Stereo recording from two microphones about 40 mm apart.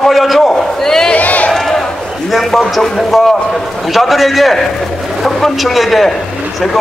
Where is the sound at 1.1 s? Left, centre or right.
Left.